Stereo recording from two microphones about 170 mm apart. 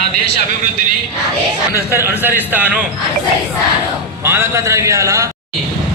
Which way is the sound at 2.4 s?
10° right (ahead or behind).